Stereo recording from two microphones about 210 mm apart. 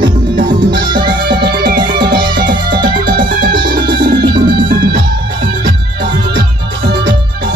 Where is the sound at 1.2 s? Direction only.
45° right (ahead or behind).